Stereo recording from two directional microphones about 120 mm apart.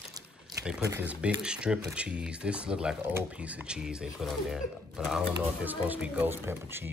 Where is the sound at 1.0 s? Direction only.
10° right (ahead or behind).